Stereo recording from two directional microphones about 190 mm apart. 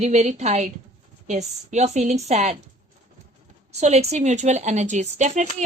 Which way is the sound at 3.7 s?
35° right (ahead or behind).